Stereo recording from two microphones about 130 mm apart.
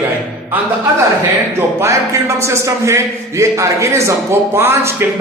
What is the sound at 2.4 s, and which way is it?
A man's voice, 20° right (ahead or behind).